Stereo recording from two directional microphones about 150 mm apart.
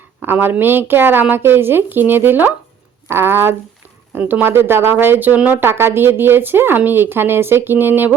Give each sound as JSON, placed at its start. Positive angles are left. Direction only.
{"t": 0.2, "sound": "speech", "side_deg": -15}